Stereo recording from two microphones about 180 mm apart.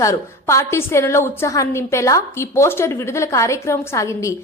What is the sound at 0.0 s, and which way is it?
A woman's voice, 15° left (ahead or behind).